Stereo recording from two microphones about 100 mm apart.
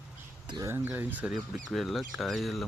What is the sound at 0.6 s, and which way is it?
Speech, 25° right (ahead or behind).